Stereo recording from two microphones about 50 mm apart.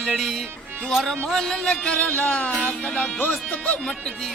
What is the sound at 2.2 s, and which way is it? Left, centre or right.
Music, centre.